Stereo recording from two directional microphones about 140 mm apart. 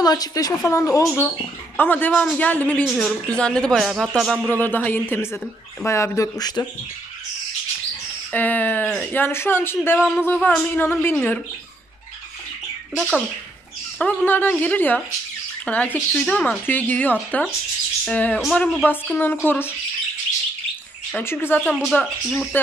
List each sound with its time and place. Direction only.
0.0 s speech: 30° left (ahead or behind); by 4.5 s centre (ahead or behind)
4.5 s speech: 15° left (ahead or behind)
8.3 s speech: 10° left (ahead or behind)
12.9 s speech: centre (ahead or behind)
13.9 s speech: 10° left (ahead or behind)
18.9 s speech: 15° left (ahead or behind)
21.2 s speech: 15° left (ahead or behind)
22.0 s speech: centre (ahead or behind)